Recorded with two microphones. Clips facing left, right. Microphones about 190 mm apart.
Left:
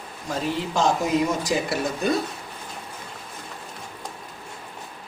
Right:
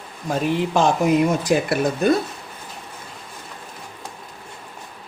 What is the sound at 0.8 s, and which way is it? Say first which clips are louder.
Speech: right 4 dB; 60° right (ahead or behind).